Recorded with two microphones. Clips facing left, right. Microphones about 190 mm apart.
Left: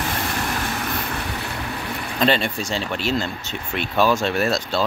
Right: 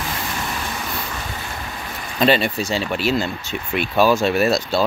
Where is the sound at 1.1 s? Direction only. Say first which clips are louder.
Left 2 dB; 65° left (ahead or behind).